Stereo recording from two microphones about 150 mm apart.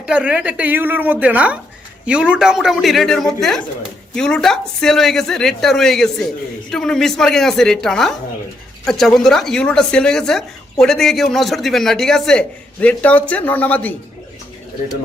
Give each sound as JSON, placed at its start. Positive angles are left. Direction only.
{"t": 0.0, "sound": "a woman's voice", "side_deg": -10}